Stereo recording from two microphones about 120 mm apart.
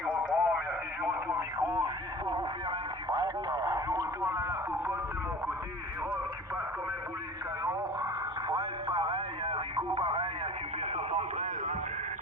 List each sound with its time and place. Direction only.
0.0 s radio: 5° right (ahead or behind)
1.3 s radio: 30° right (ahead or behind)
8.4 s radio: 45° right (ahead or behind)
10.9 s radio: 70° right (ahead or behind)